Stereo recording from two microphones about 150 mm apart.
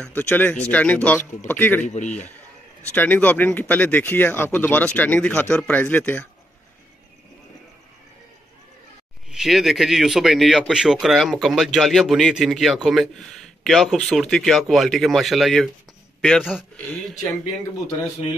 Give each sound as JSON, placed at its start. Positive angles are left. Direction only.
{"t": 0.0, "sound": "speech", "side_deg": 15}
{"t": 1.9, "sound": "a man's voice", "side_deg": 50}
{"t": 2.9, "sound": "speech", "side_deg": 10}
{"t": 9.3, "sound": "speech", "side_deg": 0}